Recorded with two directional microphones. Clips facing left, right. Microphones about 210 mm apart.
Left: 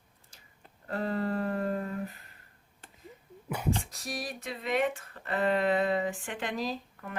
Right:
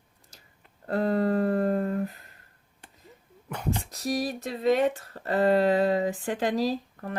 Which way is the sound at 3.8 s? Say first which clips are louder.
Right 9 dB; 40° right (ahead or behind).